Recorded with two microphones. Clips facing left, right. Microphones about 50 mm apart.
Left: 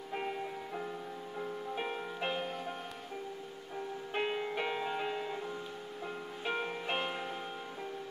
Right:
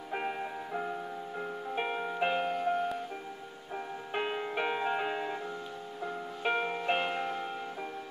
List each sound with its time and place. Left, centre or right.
0.1 s music: right
2.5 s music: centre
4.1 s music: centre
4.6 s music: right
6.4 s music: right